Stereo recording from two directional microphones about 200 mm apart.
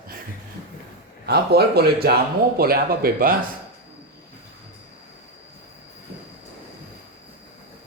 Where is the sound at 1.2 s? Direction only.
55° right (ahead or behind).